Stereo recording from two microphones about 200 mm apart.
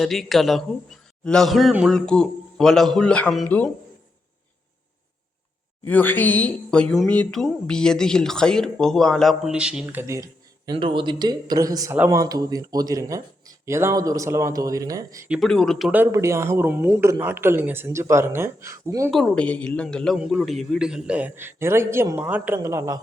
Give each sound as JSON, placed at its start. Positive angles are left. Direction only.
{"t": 0.0, "sound": "speech", "side_deg": 0}
{"t": 5.8, "sound": "speech", "side_deg": 10}
{"t": 10.7, "sound": "speech", "side_deg": -25}
{"t": 15.3, "sound": "speech", "side_deg": 0}
{"t": 19.1, "sound": "speech", "side_deg": 5}